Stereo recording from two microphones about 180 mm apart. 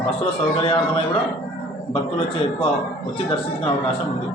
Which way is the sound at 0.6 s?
30° left (ahead or behind).